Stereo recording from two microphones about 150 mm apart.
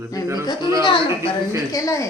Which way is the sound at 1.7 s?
20° left (ahead or behind).